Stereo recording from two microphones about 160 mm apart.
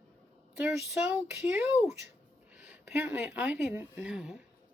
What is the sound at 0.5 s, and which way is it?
Speech, 5° right (ahead or behind).